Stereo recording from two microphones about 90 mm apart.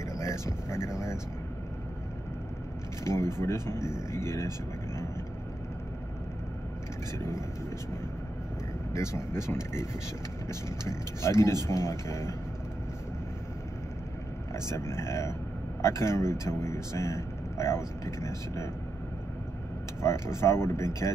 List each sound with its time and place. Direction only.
0.1 s speech: 35° left (ahead or behind)
3.0 s speech: 30° left (ahead or behind)
7.2 s speech: 30° left (ahead or behind)
8.9 s speech: 30° left (ahead or behind)
10.9 s speech: 30° left (ahead or behind)
14.7 s speech: 30° left (ahead or behind)
20.0 s speech: 30° left (ahead or behind)